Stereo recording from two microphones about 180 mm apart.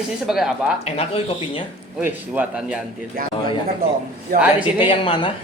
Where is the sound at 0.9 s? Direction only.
30° left (ahead or behind).